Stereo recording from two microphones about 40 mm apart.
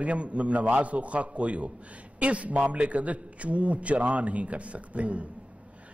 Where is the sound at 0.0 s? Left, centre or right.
Right.